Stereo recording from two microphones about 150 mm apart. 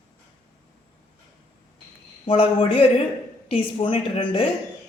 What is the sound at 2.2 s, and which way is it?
A woman's voice, 35° left (ahead or behind).